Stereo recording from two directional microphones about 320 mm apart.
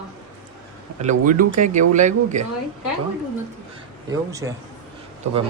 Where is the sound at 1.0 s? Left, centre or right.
Right.